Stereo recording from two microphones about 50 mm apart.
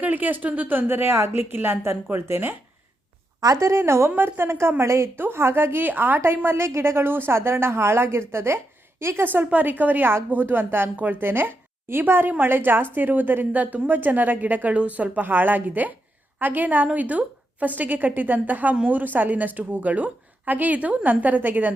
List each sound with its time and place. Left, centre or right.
0.0 s speech: right
3.6 s speech: right
6.7 s speech: right
9.2 s a woman's voice: right